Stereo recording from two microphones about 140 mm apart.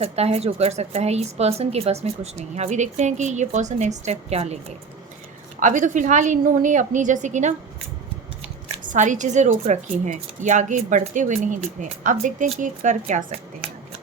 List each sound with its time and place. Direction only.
0.0 s a woman's voice: 45° right (ahead or behind)
5.5 s a woman's voice: 65° right (ahead or behind)
8.9 s a woman's voice: 60° right (ahead or behind)
12.1 s a woman's voice: 50° right (ahead or behind)